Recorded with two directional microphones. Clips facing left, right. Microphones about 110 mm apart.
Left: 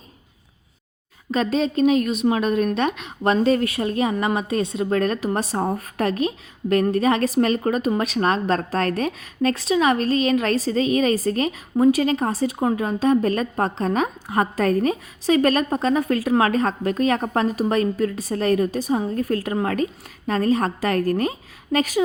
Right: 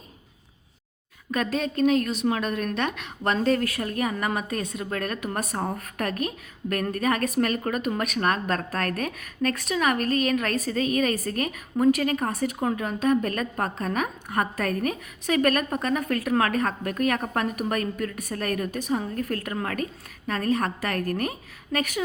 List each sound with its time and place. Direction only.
1.3 s a woman's voice: 25° left (ahead or behind)